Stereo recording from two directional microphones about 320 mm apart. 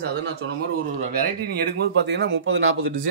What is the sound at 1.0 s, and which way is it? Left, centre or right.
Speech, right.